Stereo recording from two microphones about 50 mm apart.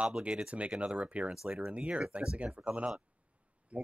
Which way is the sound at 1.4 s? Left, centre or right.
Centre.